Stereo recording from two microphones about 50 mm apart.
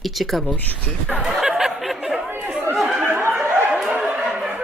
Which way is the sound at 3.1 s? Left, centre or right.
Right.